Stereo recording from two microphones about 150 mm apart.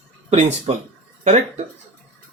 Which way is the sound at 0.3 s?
50° right (ahead or behind).